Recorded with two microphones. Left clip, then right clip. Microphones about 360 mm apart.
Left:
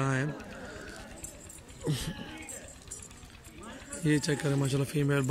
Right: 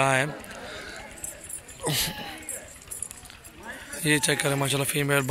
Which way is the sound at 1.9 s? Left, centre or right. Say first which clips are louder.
Right 9 dB; centre.